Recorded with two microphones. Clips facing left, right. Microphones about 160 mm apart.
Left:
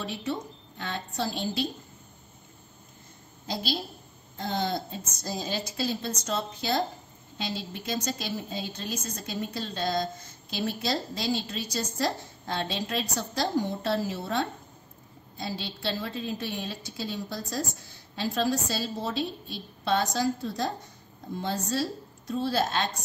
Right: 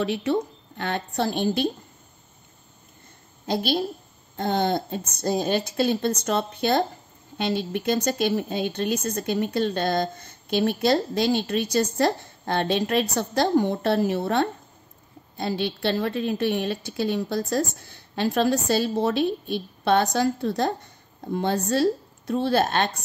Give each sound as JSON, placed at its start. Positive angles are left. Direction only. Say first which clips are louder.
{"t": 0.0, "sound": "a woman's voice", "louder": "right 9 dB", "side_deg": -75}
{"t": 3.4, "sound": "a woman's voice", "louder": "right 8 dB", "side_deg": -60}